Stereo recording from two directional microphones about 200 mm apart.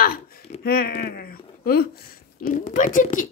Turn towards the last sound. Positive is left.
turn(degrees=40)  # may be behind; listen again after turning